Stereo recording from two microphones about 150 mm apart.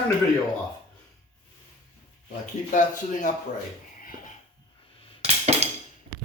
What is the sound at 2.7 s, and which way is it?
Speech, 55° left (ahead or behind).